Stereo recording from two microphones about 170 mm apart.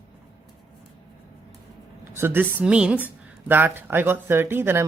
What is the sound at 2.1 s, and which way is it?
A woman's voice, 15° right (ahead or behind).